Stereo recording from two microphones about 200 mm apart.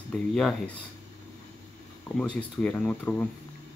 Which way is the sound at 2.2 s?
5° left (ahead or behind).